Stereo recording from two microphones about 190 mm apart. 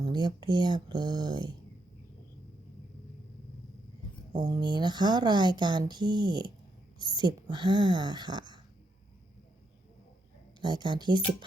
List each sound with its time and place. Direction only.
0.0 s speech: 20° right (ahead or behind)
4.3 s speech: 25° right (ahead or behind)
10.6 s speech: 25° right (ahead or behind)